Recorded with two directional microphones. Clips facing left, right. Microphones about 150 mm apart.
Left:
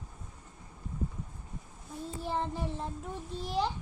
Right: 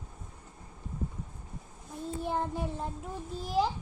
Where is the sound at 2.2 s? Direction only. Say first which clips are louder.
Right 1 dB; centre (ahead or behind).